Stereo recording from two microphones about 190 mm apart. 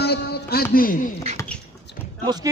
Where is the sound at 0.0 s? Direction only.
55° left (ahead or behind).